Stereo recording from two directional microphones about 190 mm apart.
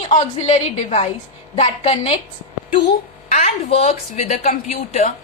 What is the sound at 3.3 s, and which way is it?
A woman's voice, 35° left (ahead or behind).